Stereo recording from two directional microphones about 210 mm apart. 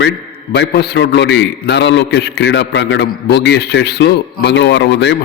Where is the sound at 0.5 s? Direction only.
55° left (ahead or behind).